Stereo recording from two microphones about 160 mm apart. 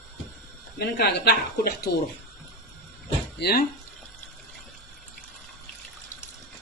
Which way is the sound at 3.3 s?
80° left.